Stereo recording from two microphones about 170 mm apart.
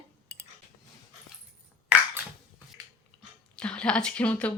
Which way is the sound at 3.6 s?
5° left (ahead or behind).